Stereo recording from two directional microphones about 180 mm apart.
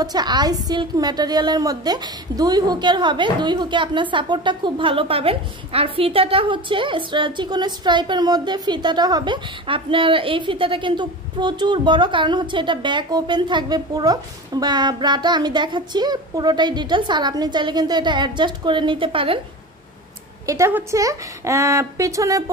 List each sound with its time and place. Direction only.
0.0 s a woman's voice: 20° right (ahead or behind)
20.4 s speech: 15° right (ahead or behind)